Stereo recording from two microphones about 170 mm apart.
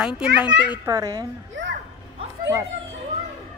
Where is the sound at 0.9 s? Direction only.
20° right (ahead or behind).